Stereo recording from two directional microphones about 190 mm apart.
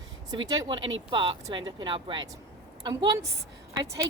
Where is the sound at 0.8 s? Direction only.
90° right.